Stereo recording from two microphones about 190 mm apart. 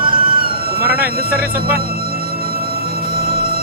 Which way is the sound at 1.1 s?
50° right (ahead or behind).